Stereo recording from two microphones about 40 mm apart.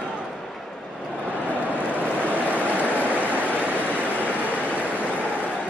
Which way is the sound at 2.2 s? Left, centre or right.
Left.